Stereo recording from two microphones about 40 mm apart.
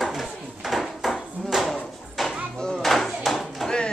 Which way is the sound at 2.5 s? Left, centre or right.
Centre.